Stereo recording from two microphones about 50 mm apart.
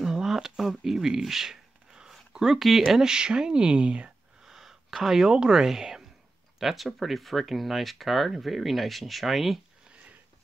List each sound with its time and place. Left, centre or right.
0.0 s a sound: centre
2.3 s speech: centre
4.5 s speech: centre